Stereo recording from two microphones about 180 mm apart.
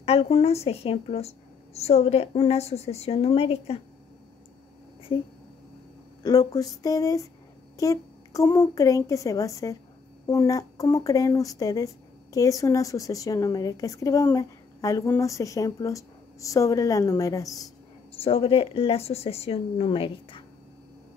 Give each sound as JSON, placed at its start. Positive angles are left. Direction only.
{"t": 0.0, "sound": "a woman's voice", "side_deg": 35}
{"t": 6.2, "sound": "a child's voice", "side_deg": 20}
{"t": 18.1, "sound": "a woman's voice", "side_deg": 30}